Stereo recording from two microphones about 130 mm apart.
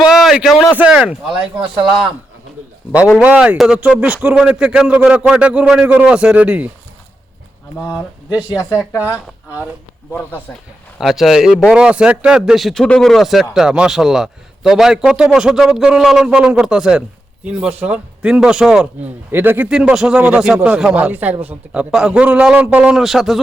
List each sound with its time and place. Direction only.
0.1 s a sound: 5° right (ahead or behind)
0.8 s speech: 10° right (ahead or behind)
1.5 s speech: 40° right (ahead or behind)
3.2 s speech: 10° right (ahead or behind)
7.9 s speech: 10° right (ahead or behind)
10.1 s speech: 15° left (ahead or behind)
10.9 s speech: centre (ahead or behind)
19.3 s speech: 15° right (ahead or behind)